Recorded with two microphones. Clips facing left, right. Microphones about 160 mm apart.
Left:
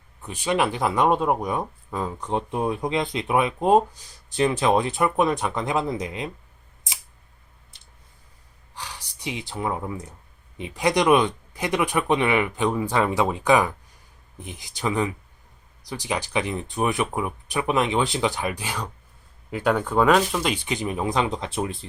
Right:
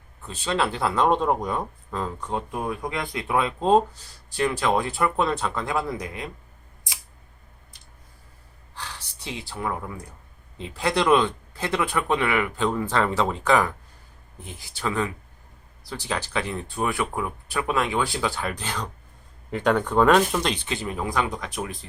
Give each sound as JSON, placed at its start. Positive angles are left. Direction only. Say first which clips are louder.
{"t": 0.2, "sound": "speech", "louder": "left 2 dB", "side_deg": 15}
{"t": 7.7, "sound": "clicking", "louder": "right 3 dB", "side_deg": 25}
{"t": 8.7, "sound": "a sound", "louder": "even", "side_deg": 15}
{"t": 10.6, "sound": "speech", "louder": "left 2 dB", "side_deg": 15}
{"t": 20.7, "sound": "speech", "louder": "left 3 dB", "side_deg": 15}